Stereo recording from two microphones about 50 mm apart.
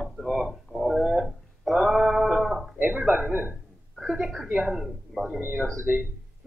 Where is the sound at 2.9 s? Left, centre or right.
Right.